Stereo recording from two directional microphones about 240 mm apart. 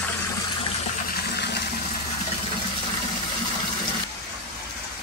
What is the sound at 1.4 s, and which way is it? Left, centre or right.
Water, left.